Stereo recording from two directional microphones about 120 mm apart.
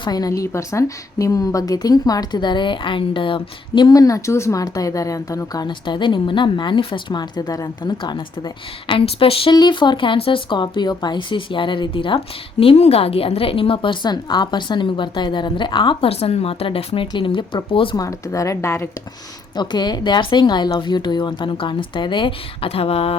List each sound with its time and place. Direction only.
0.0 s a woman's voice: 35° left (ahead or behind); by 9.6 s 50° left (ahead or behind)
9.6 s speech: 40° left (ahead or behind)
17.9 s speech: 30° left (ahead or behind)
19.5 s a woman's voice: 35° left (ahead or behind); by 23.1 s 55° left (ahead or behind)